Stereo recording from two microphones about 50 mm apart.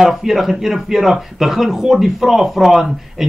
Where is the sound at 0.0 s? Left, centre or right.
Centre.